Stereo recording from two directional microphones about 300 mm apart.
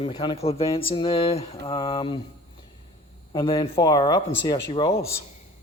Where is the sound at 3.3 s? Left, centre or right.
Centre.